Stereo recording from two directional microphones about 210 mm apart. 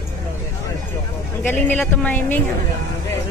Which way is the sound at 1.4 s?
10° left (ahead or behind).